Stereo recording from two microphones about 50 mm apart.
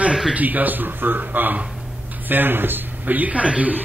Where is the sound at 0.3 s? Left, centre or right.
Right.